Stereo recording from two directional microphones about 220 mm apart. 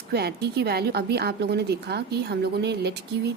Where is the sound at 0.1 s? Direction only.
45° right (ahead or behind).